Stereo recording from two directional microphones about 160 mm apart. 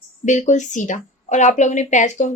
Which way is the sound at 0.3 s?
50° left (ahead or behind).